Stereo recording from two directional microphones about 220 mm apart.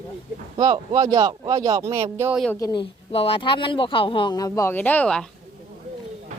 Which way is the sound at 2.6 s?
15° left (ahead or behind).